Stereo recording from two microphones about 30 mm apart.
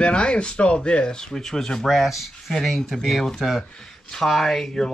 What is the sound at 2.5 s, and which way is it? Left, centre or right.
Speech, centre.